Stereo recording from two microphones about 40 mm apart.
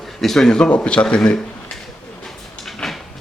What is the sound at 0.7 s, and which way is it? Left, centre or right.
Speech, left.